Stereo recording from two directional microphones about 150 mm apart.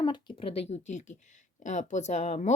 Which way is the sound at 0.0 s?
30° left (ahead or behind).